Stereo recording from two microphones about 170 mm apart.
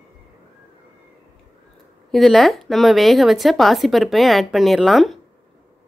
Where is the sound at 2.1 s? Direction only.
Centre (ahead or behind).